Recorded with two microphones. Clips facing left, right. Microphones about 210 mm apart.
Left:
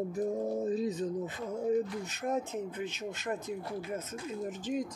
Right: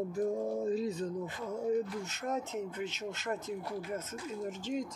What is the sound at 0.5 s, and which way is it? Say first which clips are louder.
Speech: left 1 dB; 20° left (ahead or behind).